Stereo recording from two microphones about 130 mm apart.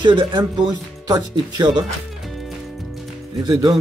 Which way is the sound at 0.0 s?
40° right (ahead or behind).